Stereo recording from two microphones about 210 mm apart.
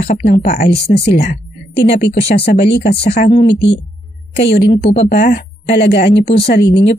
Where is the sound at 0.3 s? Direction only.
40° left (ahead or behind).